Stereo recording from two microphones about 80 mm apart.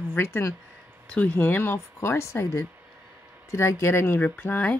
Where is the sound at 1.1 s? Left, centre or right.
Centre.